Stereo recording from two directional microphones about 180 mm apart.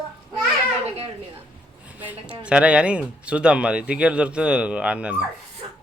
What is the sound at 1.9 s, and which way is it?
Speech, 10° right (ahead or behind).